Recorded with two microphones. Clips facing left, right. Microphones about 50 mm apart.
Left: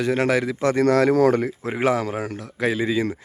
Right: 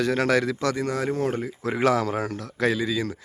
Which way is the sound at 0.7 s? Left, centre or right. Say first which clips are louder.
Left 9 dB; left.